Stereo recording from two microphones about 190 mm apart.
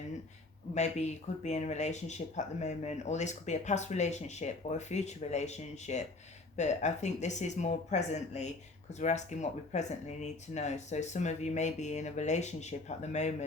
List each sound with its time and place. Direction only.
0.7 s speech: 35° left (ahead or behind)